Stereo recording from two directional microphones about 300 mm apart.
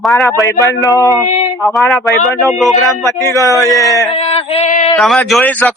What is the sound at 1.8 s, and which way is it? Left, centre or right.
Speech, centre.